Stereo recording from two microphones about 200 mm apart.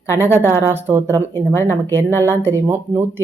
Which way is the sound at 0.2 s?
10° right (ahead or behind).